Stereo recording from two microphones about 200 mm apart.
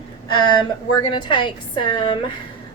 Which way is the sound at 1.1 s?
25° left (ahead or behind).